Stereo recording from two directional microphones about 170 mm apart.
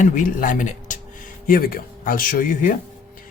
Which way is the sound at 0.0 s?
50° left (ahead or behind).